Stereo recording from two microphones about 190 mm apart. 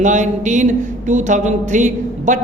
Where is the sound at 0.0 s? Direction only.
40° right (ahead or behind).